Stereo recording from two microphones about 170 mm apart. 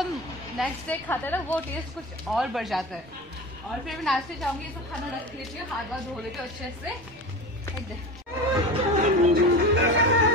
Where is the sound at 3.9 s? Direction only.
Centre (ahead or behind).